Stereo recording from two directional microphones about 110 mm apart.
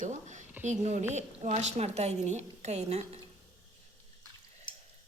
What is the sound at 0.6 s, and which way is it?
A woman's voice, 90° right.